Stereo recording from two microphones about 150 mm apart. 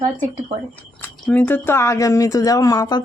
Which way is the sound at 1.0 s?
10° left (ahead or behind).